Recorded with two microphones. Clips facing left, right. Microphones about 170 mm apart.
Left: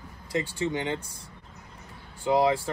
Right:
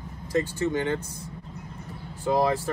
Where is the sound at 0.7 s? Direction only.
15° left (ahead or behind).